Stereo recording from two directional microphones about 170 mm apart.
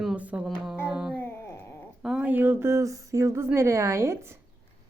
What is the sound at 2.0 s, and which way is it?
Speech, 5° right (ahead or behind).